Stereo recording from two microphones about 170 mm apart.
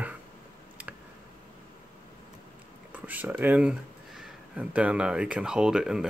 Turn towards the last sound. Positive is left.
turn(degrees=-5)  # may be behind; listen again after turning